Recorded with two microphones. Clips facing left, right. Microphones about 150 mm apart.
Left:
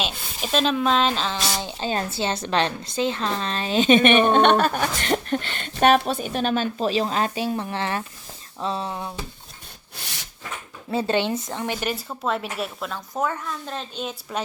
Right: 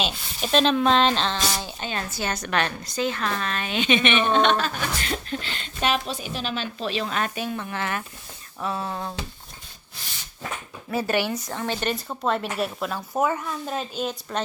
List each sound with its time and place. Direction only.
0.0 s a woman's voice: centre (ahead or behind)
1.5 s a sound: 20° left (ahead or behind)
1.9 s a woman's voice: 30° left (ahead or behind)
10.9 s a woman's voice: 25° left (ahead or behind); by 14.4 s 5° left (ahead or behind)